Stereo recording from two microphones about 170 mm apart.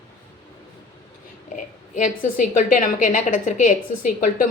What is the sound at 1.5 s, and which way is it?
A woman's voice, 50° left (ahead or behind).